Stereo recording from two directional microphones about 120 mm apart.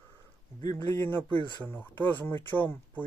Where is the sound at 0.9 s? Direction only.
20° left (ahead or behind).